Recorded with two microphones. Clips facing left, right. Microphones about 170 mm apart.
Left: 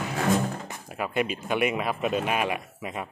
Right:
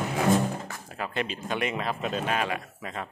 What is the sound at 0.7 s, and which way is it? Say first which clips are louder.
Speech: left 3 dB; 15° left (ahead or behind).